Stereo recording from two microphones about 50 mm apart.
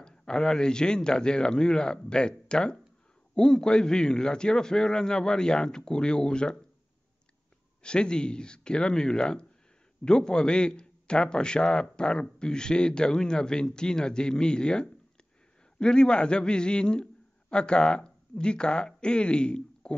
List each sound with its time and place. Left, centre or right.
0.0 s a man's voice: centre
7.8 s a man's voice: centre